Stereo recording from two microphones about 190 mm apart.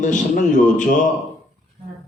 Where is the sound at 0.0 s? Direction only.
40° left (ahead or behind).